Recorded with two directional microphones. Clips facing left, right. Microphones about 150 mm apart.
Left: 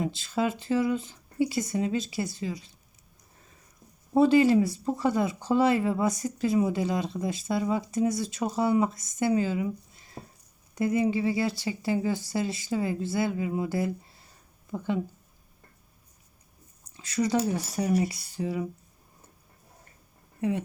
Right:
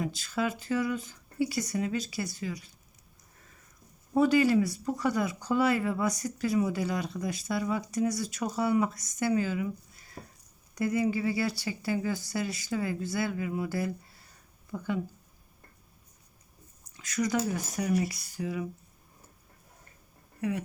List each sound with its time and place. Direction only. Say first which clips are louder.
0.0 s speech: left 3 dB; 25° left (ahead or behind)
4.1 s speech: left 3 dB; 25° left (ahead or behind)
17.0 s speech: left 3 dB; 25° left (ahead or behind)
20.4 s speech: left 3 dB; 25° left (ahead or behind)